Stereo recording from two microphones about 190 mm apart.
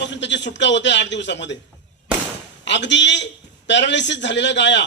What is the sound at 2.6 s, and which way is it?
Speech, 70° left (ahead or behind).